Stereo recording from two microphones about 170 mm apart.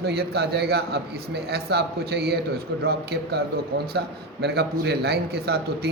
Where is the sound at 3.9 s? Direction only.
75° right (ahead or behind).